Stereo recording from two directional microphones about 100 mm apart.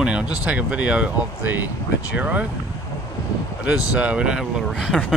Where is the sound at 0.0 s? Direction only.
10° right (ahead or behind).